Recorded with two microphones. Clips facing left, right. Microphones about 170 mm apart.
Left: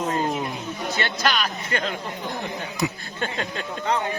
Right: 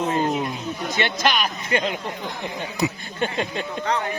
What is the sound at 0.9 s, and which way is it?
Speech, 15° right (ahead or behind).